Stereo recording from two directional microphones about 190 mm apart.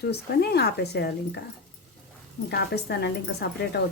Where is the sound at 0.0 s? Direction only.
60° left (ahead or behind).